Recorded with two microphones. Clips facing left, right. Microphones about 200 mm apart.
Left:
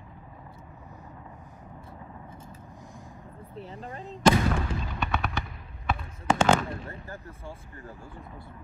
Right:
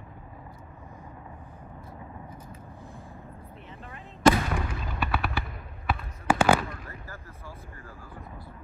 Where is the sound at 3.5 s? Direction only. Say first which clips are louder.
Left 5 dB; 35° left (ahead or behind).